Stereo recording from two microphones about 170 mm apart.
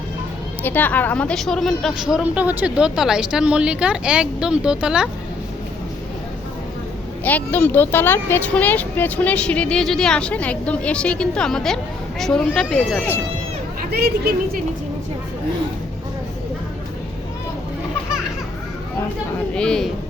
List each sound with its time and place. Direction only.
0.6 s a woman's voice: 10° left (ahead or behind)
7.3 s a woman's voice: 10° left (ahead or behind)
13.9 s a woman's voice: 70° right (ahead or behind)
19.5 s a woman's voice: 5° left (ahead or behind)